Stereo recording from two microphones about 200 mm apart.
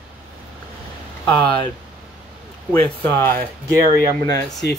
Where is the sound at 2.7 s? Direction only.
5° left (ahead or behind).